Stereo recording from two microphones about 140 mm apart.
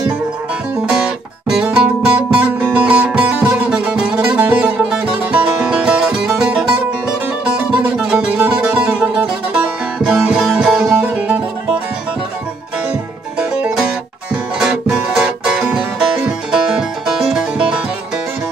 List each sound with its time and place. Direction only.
0.8 s music: 5° right (ahead or behind)
13.4 s music: 5° right (ahead or behind)